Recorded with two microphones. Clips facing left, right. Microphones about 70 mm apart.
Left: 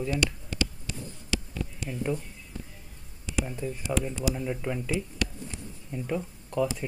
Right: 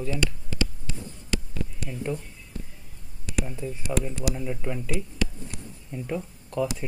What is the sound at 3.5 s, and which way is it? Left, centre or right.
Speech, centre.